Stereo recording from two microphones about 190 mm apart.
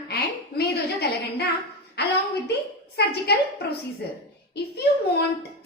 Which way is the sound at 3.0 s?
55° left (ahead or behind).